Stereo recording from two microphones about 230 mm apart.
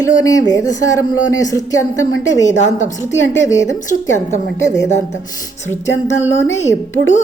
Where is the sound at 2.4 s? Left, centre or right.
Left.